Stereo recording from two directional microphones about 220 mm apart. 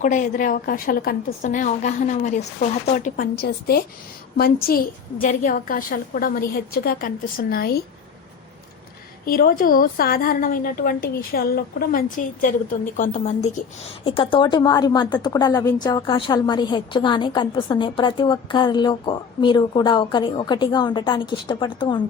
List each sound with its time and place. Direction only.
0.0 s a woman's voice: 35° left (ahead or behind)
9.2 s a woman's voice: 40° left (ahead or behind)
14.0 s a woman's voice: 25° left (ahead or behind)